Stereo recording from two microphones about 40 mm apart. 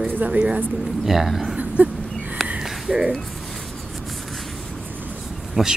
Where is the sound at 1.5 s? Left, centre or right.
Right.